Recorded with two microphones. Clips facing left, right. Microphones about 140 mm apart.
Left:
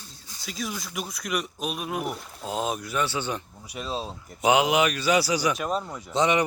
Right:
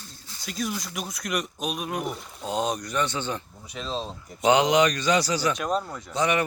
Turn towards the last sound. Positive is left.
turn(degrees=20)  # may be behind; listen again after turning